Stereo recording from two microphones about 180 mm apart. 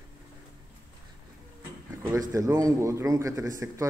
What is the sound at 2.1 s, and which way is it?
A man's voice, 20° right (ahead or behind).